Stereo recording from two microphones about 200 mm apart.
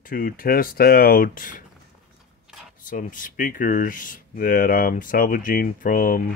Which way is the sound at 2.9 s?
40° left (ahead or behind).